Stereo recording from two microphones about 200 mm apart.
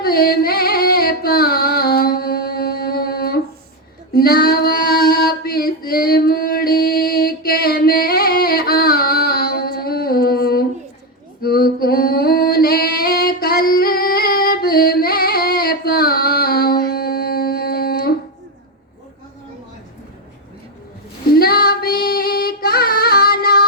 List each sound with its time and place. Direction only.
0.0 s singing: 50° left (ahead or behind)
4.1 s female singing: 50° left (ahead or behind)
11.4 s singing: 50° left (ahead or behind)
21.2 s female singing: 50° left (ahead or behind)